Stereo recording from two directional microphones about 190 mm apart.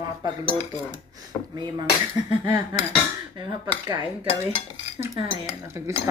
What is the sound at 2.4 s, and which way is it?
Dishes, 20° right (ahead or behind).